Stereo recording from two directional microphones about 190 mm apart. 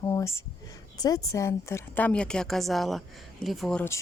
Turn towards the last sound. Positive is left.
turn(degrees=5)  # may be behind; listen again after turning